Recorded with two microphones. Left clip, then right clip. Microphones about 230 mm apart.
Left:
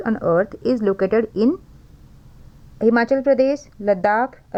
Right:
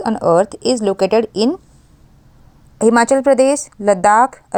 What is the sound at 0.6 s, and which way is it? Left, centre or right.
Speech, right.